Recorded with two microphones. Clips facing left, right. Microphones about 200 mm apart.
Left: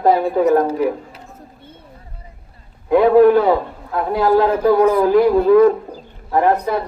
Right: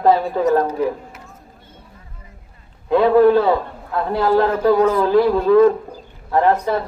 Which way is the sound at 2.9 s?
15° left (ahead or behind).